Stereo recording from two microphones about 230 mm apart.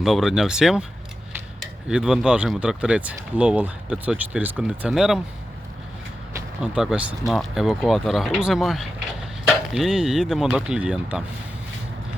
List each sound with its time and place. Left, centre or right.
0.0 s speech: centre
1.9 s speech: centre
6.3 s speech: centre